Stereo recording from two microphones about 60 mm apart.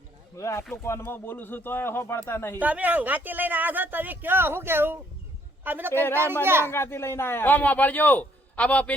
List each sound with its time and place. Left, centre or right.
0.3 s speech: left
1.0 s a man's voice: left
2.6 s speech: right
5.9 s a man's voice: left
6.4 s speech: right
6.7 s a man's voice: left